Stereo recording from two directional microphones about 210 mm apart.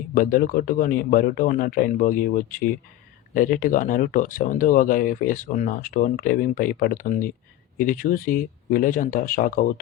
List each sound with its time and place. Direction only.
0.1 s speech: 40° left (ahead or behind)